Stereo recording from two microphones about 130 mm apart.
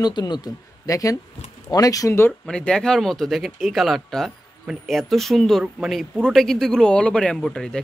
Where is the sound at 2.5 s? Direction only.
5° left (ahead or behind).